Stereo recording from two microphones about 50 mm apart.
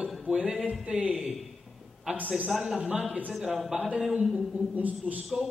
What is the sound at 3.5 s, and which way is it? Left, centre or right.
A man's voice, centre.